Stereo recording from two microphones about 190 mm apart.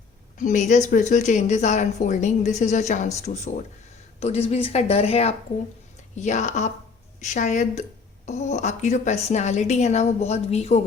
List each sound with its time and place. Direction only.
0.3 s a woman's voice: 40° left (ahead or behind)